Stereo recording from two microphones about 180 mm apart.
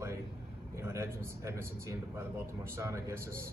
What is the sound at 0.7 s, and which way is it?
A man's voice, 15° right (ahead or behind).